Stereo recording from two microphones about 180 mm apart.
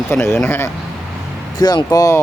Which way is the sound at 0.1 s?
15° left (ahead or behind).